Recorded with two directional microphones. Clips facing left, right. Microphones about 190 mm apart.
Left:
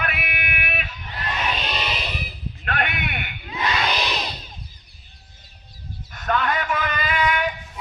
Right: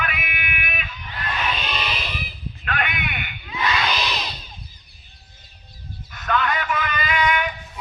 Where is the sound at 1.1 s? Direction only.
25° left (ahead or behind).